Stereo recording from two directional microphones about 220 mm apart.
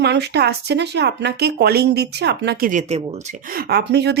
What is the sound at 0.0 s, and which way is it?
A woman's voice, 50° right (ahead or behind).